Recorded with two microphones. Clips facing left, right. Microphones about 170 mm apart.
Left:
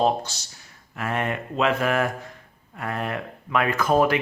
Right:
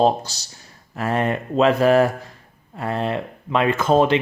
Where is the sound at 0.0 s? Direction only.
35° right (ahead or behind).